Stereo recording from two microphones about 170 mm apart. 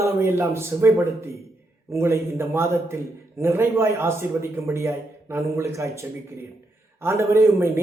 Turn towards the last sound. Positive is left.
turn(degrees=-15)  # may be behind; listen again after turning